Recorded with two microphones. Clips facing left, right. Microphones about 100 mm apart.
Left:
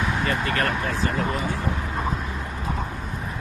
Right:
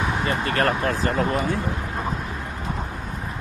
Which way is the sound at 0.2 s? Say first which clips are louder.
Right 4 dB; 30° right (ahead or behind).